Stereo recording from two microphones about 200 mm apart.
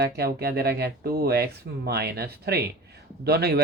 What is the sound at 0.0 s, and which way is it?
Speech, 50° right (ahead or behind).